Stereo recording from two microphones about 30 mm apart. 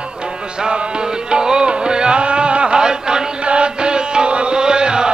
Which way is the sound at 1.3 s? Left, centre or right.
Right.